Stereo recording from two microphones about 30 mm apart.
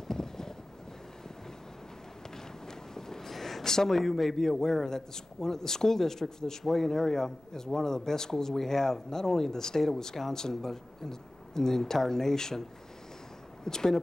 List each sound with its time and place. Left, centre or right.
0.1 s vehicle: centre
2.3 s a sound: centre
3.7 s a man's voice: centre
13.7 s speech: centre